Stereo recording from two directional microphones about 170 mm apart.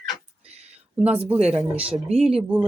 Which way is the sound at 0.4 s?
40° right (ahead or behind).